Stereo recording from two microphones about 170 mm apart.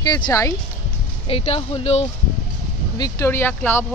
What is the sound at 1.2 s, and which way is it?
Speech, 35° left (ahead or behind).